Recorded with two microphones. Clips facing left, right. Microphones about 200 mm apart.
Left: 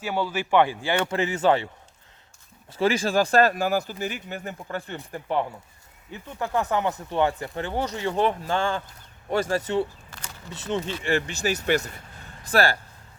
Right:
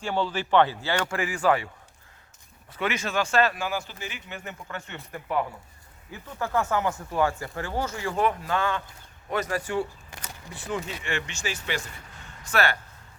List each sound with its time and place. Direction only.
0.0 s speech: 10° left (ahead or behind)
10.1 s a sound: 15° right (ahead or behind)
10.5 s speech: 25° left (ahead or behind)